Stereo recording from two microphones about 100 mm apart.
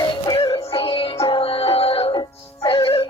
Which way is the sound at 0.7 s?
65° left (ahead or behind).